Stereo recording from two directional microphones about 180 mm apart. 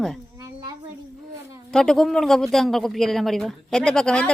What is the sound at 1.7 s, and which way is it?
Speech, 5° left (ahead or behind).